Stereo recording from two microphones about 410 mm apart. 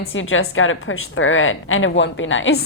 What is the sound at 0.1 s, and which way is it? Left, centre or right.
A woman's voice, left.